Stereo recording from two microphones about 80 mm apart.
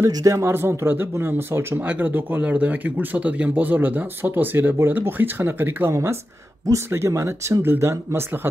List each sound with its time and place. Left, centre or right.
0.1 s speech: right